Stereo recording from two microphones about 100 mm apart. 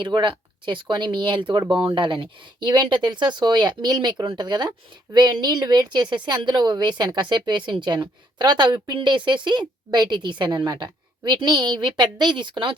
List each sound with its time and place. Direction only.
0.0 s a woman's voice: 55° right (ahead or behind)